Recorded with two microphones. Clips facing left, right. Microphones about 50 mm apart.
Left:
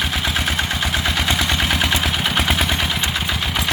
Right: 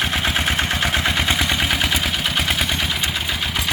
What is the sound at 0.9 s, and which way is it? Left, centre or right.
Vehicle, centre.